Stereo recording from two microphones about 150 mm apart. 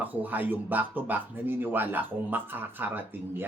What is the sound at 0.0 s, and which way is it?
Speech, 10° right (ahead or behind).